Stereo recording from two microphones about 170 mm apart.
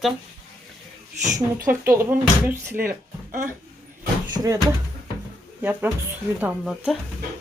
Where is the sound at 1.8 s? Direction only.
15° right (ahead or behind).